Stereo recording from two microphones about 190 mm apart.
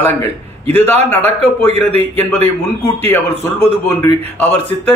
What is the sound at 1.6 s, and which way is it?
Speech, 35° right (ahead or behind).